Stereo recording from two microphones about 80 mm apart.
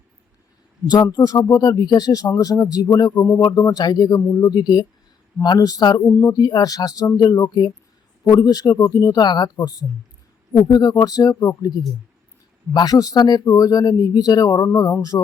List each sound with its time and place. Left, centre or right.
0.9 s speech: left
3.2 s speech: left
3.4 s speech: left
10.7 s speech: left